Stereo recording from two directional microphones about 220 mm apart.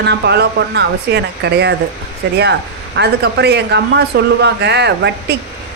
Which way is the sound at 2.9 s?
50° right (ahead or behind).